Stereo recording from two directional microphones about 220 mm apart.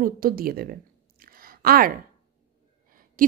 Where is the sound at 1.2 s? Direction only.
40° right (ahead or behind).